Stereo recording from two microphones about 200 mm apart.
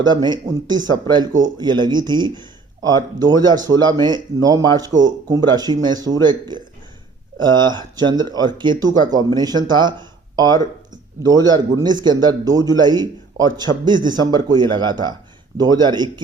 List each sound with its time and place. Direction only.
0.1 s speech: 20° right (ahead or behind)
7.4 s speech: 20° right (ahead or behind)